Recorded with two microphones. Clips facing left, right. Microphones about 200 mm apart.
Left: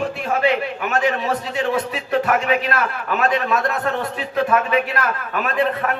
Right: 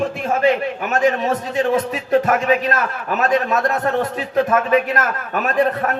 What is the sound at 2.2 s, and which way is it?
A man's voice, 40° right (ahead or behind).